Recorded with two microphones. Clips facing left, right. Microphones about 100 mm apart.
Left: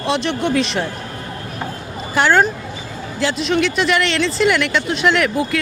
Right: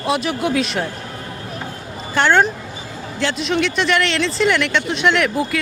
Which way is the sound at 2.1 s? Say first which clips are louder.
Left 1 dB; 5° left (ahead or behind).